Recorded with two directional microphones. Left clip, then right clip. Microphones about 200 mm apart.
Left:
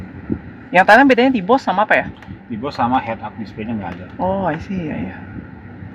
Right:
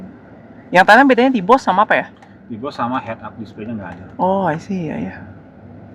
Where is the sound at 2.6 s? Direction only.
30° left (ahead or behind).